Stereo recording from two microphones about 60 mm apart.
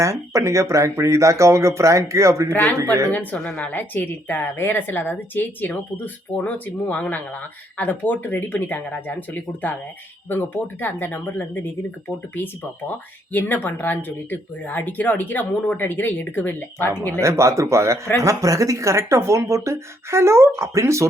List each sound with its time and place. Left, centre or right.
0.0 s speech: right
3.1 s speech: left
3.4 s a woman's voice: centre
3.7 s speech: left
17.1 s speech: right